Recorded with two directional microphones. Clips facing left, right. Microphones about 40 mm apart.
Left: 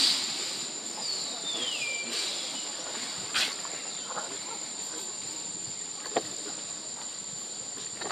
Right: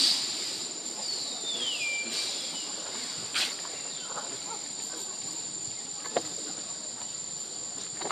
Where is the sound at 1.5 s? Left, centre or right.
Centre.